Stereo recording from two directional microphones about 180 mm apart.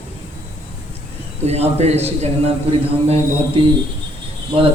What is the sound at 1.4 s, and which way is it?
A man's voice, 35° right (ahead or behind).